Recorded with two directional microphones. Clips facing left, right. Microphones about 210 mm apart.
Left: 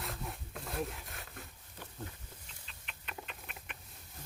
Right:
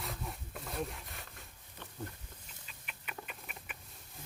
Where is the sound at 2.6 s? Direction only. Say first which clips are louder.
Right 1 dB; 5° right (ahead or behind).